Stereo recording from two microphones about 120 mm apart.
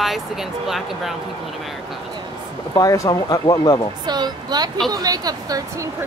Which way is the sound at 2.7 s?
30° left (ahead or behind).